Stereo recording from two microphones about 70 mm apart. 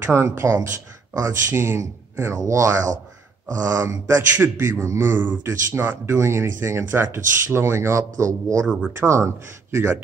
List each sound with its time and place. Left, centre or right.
0.1 s a man's voice: right
5.2 s speech: right
5.5 s a man's voice: right